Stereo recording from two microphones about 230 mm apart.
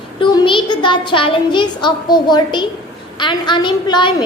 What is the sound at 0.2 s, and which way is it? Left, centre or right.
A child's voice, left.